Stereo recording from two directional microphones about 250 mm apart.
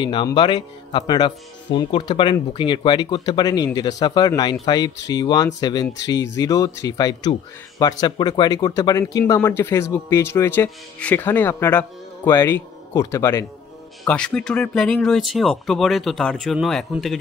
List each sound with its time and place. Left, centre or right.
0.0 s speech: centre